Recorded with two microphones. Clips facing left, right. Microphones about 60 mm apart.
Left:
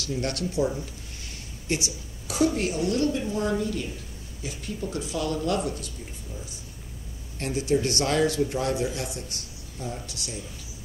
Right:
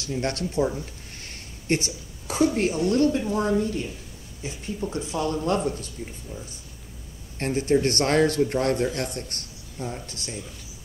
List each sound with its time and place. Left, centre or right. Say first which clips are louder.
0.0 s a woman's voice: right 1 dB; right
7.3 s a man's voice: right 3 dB; right
9.8 s speech: right 2 dB; right